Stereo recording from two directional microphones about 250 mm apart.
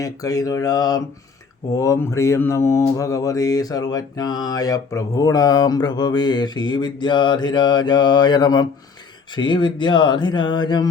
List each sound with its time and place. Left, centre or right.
0.0 s mantra: centre